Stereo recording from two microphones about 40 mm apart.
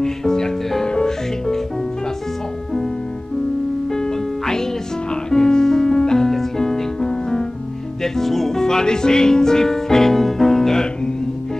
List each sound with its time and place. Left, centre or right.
0.0 s music: centre
3.9 s music: centre
8.0 s music: centre